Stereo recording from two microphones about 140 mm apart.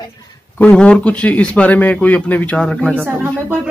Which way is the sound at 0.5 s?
10° left (ahead or behind).